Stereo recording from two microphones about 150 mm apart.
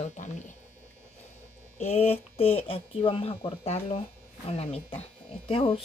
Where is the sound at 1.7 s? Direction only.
45° left (ahead or behind).